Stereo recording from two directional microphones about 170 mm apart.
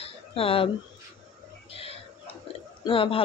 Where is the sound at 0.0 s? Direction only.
35° left (ahead or behind).